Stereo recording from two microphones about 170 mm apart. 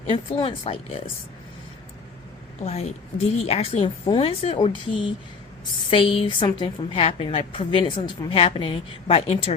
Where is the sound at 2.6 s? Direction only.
40° left (ahead or behind).